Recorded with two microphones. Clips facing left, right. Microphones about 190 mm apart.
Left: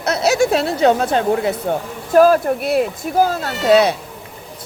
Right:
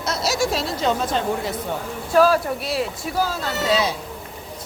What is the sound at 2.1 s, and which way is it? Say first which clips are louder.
Speech: left 5 dB; 50° left (ahead or behind).